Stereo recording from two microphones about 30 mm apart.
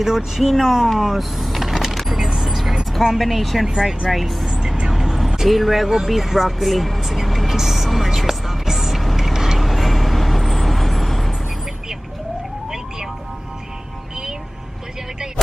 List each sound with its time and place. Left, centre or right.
0.4 s speech: centre
0.9 s vehicle: centre
3.2 s speech: centre
3.6 s speech: centre
4.1 s speech: centre
4.5 s vehicle: centre
5.9 s speech: centre
7.5 s music: centre
9.1 s vehicle: centre
9.6 s vehicle: centre